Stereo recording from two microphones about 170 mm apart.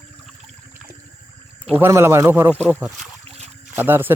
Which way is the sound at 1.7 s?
15° right (ahead or behind).